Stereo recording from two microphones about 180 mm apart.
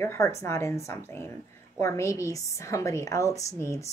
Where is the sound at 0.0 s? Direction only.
15° left (ahead or behind).